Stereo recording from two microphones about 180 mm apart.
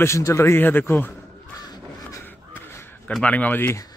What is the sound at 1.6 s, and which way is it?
Crow, 20° left (ahead or behind).